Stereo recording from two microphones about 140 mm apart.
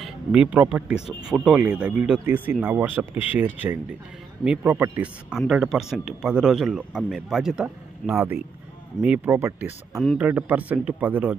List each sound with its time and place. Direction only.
0.0 s speech: 5° right (ahead or behind)